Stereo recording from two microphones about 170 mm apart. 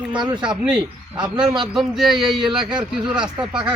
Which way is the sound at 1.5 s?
Centre (ahead or behind).